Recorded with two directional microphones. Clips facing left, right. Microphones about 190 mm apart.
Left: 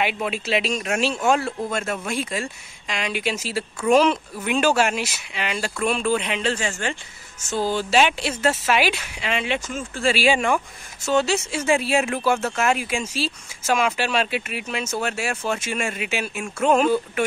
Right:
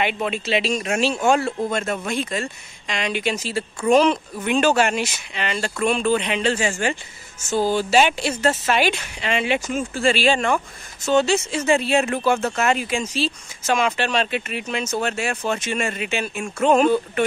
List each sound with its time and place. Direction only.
0.0 s speech: 5° left (ahead or behind)
9.7 s speech: 15° right (ahead or behind)
10.0 s speech: 10° left (ahead or behind)